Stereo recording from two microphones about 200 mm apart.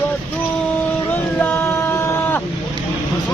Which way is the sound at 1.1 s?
10° left (ahead or behind).